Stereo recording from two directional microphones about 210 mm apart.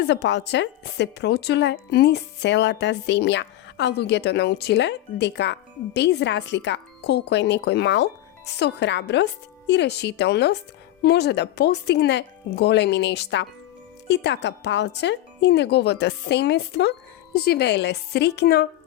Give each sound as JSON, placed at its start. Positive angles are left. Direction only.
{"t": 0.0, "sound": "a woman's voice", "side_deg": 55}